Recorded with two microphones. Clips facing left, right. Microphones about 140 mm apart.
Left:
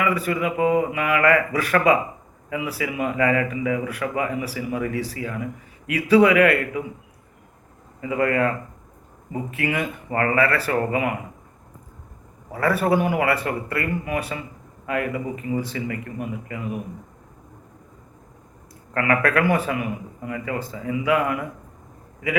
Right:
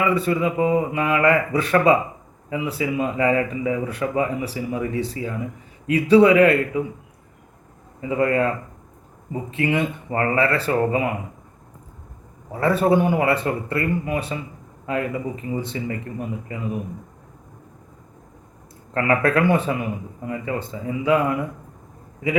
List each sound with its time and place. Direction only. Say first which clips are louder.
0.0 s speech: right 2 dB; 25° right (ahead or behind)
8.0 s speech: right 1 dB; 25° right (ahead or behind)
12.5 s speech: right 2 dB; 25° right (ahead or behind)
18.9 s speech: right 2 dB; 25° right (ahead or behind)